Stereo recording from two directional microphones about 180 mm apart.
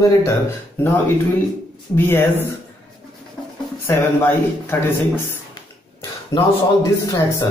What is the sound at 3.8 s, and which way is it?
Speech, 10° left (ahead or behind).